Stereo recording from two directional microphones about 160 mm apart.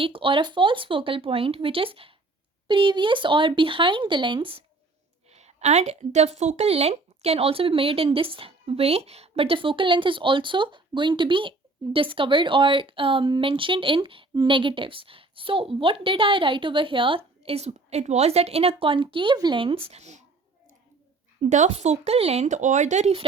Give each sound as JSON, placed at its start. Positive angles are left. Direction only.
{"t": 0.0, "sound": "speech", "side_deg": -35}
{"t": 5.3, "sound": "speech", "side_deg": -45}
{"t": 21.5, "sound": "speech", "side_deg": -45}